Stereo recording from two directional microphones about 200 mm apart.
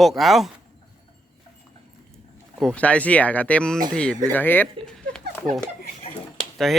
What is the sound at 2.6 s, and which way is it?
A man's voice, 5° left (ahead or behind).